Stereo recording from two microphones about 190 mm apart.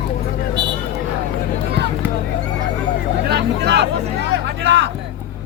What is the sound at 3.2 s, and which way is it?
Vehicle, 60° right (ahead or behind).